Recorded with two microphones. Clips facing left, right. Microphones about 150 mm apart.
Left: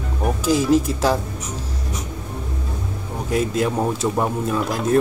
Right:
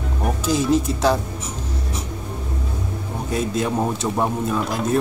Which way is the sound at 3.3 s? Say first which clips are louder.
Left 2 dB; 60° left (ahead or behind).